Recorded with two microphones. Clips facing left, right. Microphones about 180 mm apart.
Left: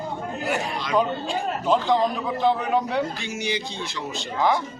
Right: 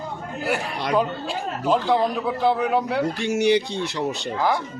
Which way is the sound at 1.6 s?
10° right (ahead or behind).